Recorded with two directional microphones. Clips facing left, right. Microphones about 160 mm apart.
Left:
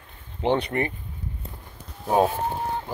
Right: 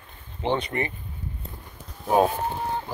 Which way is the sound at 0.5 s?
55° left (ahead or behind).